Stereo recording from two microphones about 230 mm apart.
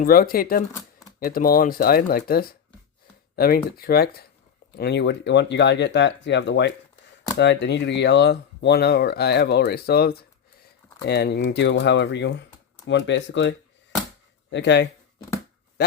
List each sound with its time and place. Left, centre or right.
0.0 s speech: left